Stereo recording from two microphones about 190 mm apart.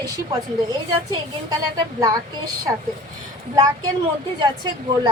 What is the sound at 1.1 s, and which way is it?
Speech, 20° right (ahead or behind).